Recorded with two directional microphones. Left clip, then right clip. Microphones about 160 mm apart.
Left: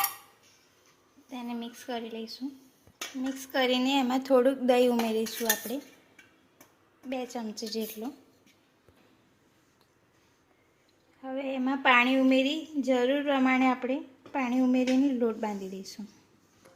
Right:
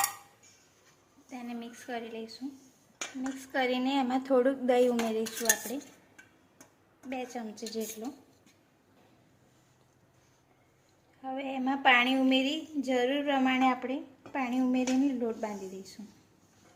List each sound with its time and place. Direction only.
1.3 s a woman's voice: 30° left (ahead or behind)
3.4 s speech: 25° left (ahead or behind)
7.1 s a woman's voice: 25° left (ahead or behind)
11.2 s speech: 30° left (ahead or behind)